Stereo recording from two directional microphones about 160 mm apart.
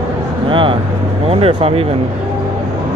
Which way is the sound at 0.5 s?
30° right (ahead or behind).